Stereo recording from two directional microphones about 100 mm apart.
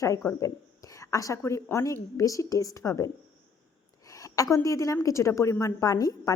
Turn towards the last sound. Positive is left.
turn(degrees=35)  # may be behind; listen again after turning